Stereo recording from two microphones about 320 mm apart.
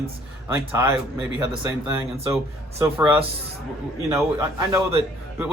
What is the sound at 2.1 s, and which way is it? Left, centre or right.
Speech, centre.